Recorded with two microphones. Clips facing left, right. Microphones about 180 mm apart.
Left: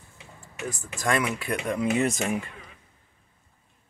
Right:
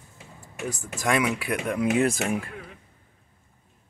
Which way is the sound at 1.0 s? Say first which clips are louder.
Right 2 dB; 10° right (ahead or behind).